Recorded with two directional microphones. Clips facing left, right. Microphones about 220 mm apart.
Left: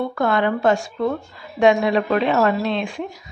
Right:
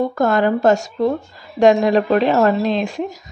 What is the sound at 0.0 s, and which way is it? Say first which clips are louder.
Speech: right 4 dB; 45° right (ahead or behind).